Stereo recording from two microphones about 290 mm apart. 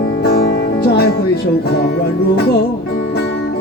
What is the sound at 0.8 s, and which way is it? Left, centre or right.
Music, left.